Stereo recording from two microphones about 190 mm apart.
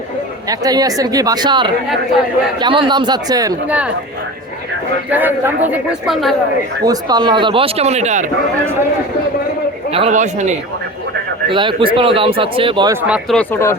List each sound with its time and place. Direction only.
0.4 s speech: 20° right (ahead or behind)
5.1 s speech: 10° right (ahead or behind)
6.8 s speech: 20° right (ahead or behind); by 8.3 s 40° right (ahead or behind)
9.9 s speech: 35° right (ahead or behind)
11.5 s speech: 25° right (ahead or behind)
12.9 s speech: 10° right (ahead or behind)